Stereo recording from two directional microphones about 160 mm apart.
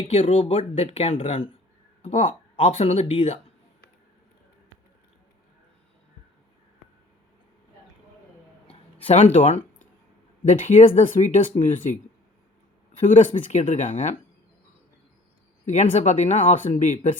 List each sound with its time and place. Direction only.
0.1 s speech: 40° left (ahead or behind)
9.0 s speech: 45° left (ahead or behind)
13.0 s speech: 50° left (ahead or behind)
15.6 s speech: 50° left (ahead or behind)